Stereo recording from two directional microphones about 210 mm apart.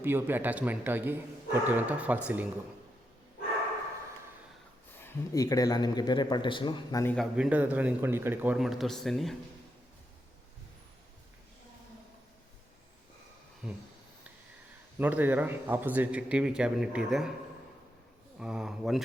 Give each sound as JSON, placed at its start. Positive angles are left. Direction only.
{"t": 0.0, "sound": "a man's voice", "side_deg": -10}
{"t": 4.9, "sound": "speech", "side_deg": 15}
{"t": 7.3, "sound": "a man's voice", "side_deg": -5}
{"t": 13.6, "sound": "speech", "side_deg": -5}
{"t": 14.9, "sound": "a man's voice", "side_deg": -10}
{"t": 18.3, "sound": "a man's voice", "side_deg": -5}